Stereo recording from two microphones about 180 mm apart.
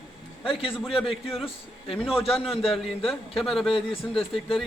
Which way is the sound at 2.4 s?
Centre (ahead or behind).